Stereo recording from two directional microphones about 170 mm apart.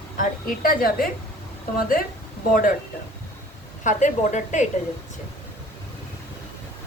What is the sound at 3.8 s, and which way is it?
Speech, 45° left (ahead or behind).